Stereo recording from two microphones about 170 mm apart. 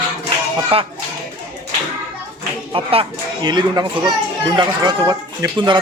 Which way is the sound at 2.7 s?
30° right (ahead or behind).